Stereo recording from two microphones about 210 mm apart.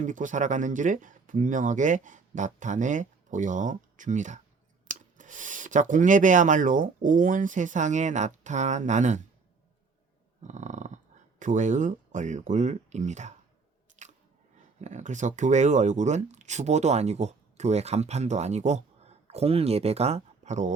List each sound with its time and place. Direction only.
0.0 s speech: 35° right (ahead or behind)
10.4 s speech: 35° right (ahead or behind)
14.0 s chewing: 35° right (ahead or behind)
14.8 s speech: 35° right (ahead or behind)